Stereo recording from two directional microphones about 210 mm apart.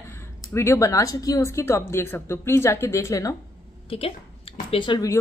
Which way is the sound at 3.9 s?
25° left (ahead or behind).